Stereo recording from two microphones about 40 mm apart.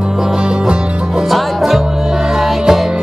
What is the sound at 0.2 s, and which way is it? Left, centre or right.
Music, centre.